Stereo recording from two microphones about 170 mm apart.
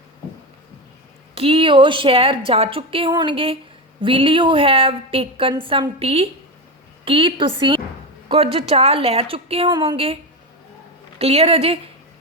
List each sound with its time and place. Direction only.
1.4 s a woman's voice: 30° right (ahead or behind)
11.2 s a woman's voice: 35° right (ahead or behind)